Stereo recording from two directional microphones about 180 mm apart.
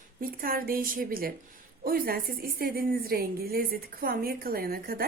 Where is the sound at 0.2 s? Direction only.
55° right (ahead or behind).